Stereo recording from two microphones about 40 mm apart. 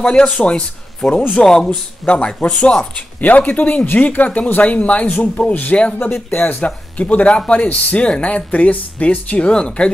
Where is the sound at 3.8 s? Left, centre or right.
Left.